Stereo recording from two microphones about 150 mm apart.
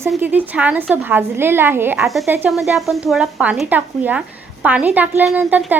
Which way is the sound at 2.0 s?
Centre (ahead or behind).